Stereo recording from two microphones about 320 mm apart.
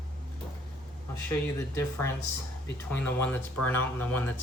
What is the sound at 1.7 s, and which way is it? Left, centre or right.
Speech, centre.